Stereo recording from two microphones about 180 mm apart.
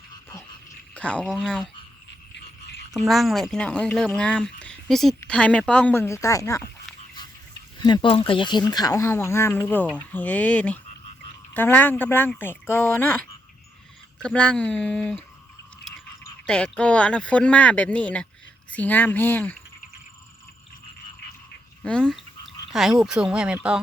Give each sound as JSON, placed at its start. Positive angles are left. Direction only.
{"t": 0.1, "sound": "frog", "side_deg": 20}
{"t": 0.9, "sound": "speech", "side_deg": 5}
{"t": 2.9, "sound": "speech", "side_deg": 0}
{"t": 7.8, "sound": "speech", "side_deg": 25}
{"t": 16.5, "sound": "speech", "side_deg": 5}
{"t": 21.8, "sound": "a sound", "side_deg": 5}
{"t": 22.7, "sound": "speech", "side_deg": 0}